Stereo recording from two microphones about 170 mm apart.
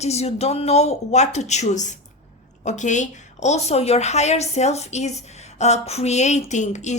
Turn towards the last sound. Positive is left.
turn(degrees=45)  # may be behind; listen again after turning